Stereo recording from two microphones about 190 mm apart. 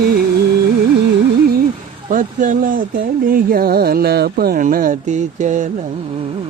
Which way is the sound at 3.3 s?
50° right (ahead or behind).